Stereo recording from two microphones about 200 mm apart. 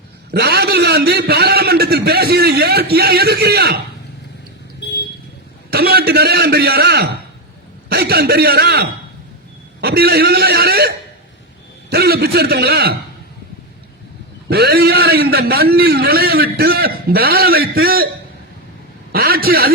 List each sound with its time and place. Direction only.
0.3 s a man's voice: 50° right (ahead or behind)
5.7 s a man's voice: 50° right (ahead or behind)
14.5 s a man's voice: 50° right (ahead or behind)
19.1 s a man's voice: 50° right (ahead or behind)